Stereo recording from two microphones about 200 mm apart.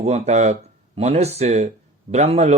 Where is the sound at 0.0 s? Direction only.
35° right (ahead or behind).